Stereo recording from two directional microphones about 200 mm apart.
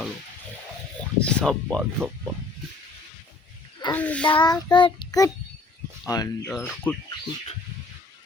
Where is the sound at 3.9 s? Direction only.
5° left (ahead or behind).